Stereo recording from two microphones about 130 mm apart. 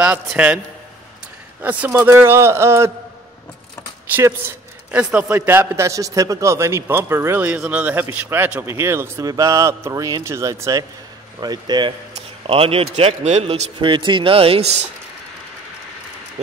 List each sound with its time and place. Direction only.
1.6 s a man's voice: 10° right (ahead or behind)
4.1 s a man's voice: 15° right (ahead or behind); by 11.9 s 35° right (ahead or behind)
12.2 s a man's voice: 45° right (ahead or behind)